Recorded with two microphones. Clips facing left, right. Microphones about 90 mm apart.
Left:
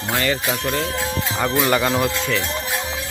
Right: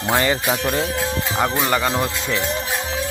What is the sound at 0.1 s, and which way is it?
Speech, 20° right (ahead or behind).